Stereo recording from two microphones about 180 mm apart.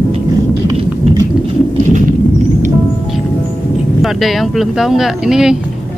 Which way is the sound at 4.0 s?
Centre (ahead or behind).